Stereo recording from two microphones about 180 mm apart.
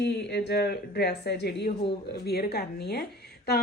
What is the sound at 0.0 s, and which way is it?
A woman's voice, 70° left (ahead or behind).